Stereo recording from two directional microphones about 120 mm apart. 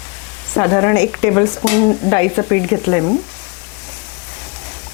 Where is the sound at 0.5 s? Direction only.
25° left (ahead or behind).